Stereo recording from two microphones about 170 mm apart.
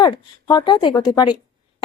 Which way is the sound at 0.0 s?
25° left (ahead or behind).